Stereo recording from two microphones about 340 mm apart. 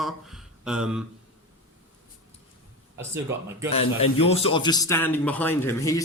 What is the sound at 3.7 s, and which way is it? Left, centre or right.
A man's voice, centre.